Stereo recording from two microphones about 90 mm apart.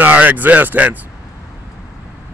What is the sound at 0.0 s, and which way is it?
Speech, 20° right (ahead or behind).